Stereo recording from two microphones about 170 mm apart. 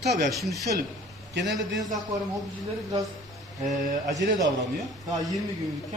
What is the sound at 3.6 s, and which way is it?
Speech, 50° right (ahead or behind).